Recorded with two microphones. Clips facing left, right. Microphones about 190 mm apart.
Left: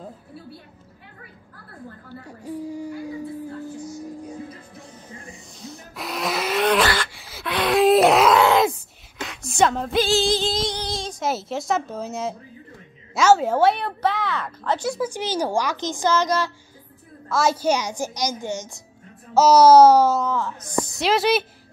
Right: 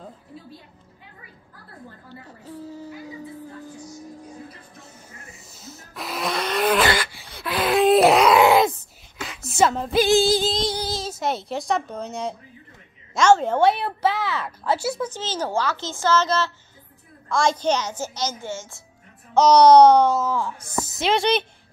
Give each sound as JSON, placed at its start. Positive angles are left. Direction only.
{"t": 2.2, "sound": "a sound", "side_deg": 15}
{"t": 5.2, "sound": "a sound", "side_deg": -5}
{"t": 7.0, "sound": "gasp", "side_deg": 0}
{"t": 8.4, "sound": "groan", "side_deg": -15}
{"t": 9.2, "sound": "a sound", "side_deg": 0}
{"t": 9.9, "sound": "singing", "side_deg": -15}
{"t": 10.2, "sound": "a sound", "side_deg": -5}
{"t": 13.1, "sound": "a woman's voice", "side_deg": 5}
{"t": 15.0, "sound": "a woman's voice", "side_deg": 10}
{"t": 19.3, "sound": "a woman's voice", "side_deg": 5}
{"t": 20.2, "sound": "speech", "side_deg": -10}
{"t": 20.9, "sound": "a woman's voice", "side_deg": 0}